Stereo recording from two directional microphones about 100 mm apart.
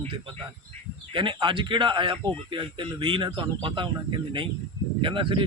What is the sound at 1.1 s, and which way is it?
Speech, 55° right (ahead or behind).